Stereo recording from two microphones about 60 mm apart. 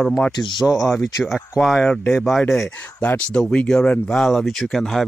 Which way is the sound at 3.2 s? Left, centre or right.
Centre.